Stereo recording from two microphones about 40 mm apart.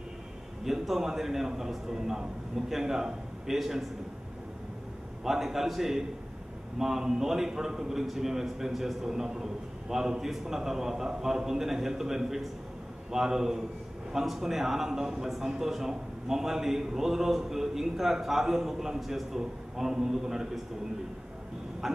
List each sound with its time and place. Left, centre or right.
0.7 s a man's voice: centre
5.2 s a man's voice: centre
21.8 s a sound: centre